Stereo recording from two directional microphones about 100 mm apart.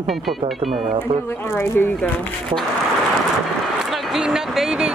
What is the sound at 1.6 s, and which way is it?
Speech, 20° left (ahead or behind).